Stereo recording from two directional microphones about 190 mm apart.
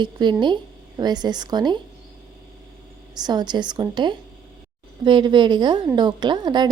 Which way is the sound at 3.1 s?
20° right (ahead or behind).